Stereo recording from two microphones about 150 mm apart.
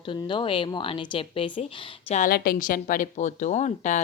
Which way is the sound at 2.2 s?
85° left.